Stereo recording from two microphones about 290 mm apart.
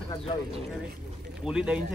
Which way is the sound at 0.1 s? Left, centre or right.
Centre.